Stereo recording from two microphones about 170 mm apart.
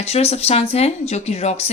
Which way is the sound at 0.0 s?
40° left (ahead or behind).